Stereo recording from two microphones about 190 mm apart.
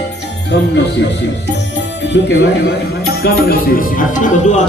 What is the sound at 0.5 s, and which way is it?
Speech, 65° left (ahead or behind).